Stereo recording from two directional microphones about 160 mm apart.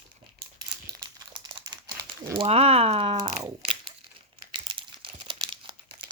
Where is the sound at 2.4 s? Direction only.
40° right (ahead or behind).